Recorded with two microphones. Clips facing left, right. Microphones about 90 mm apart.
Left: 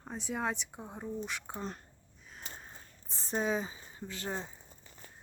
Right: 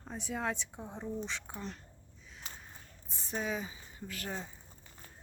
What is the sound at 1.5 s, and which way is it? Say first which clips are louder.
Speech: left 3 dB; 30° left (ahead or behind).